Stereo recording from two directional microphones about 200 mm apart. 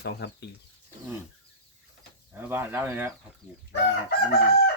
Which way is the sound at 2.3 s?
10° right (ahead or behind).